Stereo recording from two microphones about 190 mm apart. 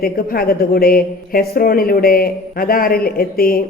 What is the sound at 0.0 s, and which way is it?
A woman's voice, 50° left (ahead or behind).